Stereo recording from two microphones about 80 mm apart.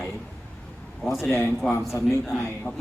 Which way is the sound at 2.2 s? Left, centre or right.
Centre.